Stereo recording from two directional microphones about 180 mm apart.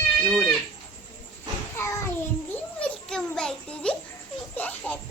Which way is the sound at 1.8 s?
15° left (ahead or behind).